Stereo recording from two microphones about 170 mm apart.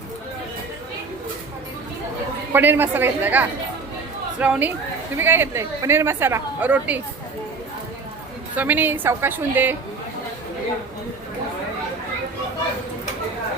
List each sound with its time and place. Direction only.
2.5 s a woman's voice: 10° right (ahead or behind)
8.5 s a woman's voice: 10° right (ahead or behind)